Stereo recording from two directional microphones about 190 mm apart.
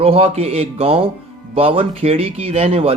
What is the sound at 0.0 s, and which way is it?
Speech, 30° right (ahead or behind).